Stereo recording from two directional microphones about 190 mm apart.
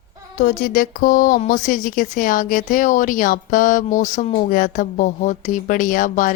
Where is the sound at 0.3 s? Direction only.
45° left (ahead or behind).